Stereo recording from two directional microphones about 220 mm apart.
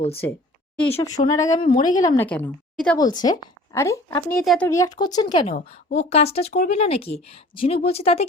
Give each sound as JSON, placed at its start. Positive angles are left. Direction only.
{"t": 0.8, "sound": "speech", "side_deg": 15}
{"t": 2.0, "sound": "speech", "side_deg": 15}
{"t": 3.0, "sound": "speech", "side_deg": 20}